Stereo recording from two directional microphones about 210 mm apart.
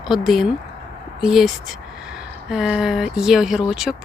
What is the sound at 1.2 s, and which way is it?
Speech, centre (ahead or behind).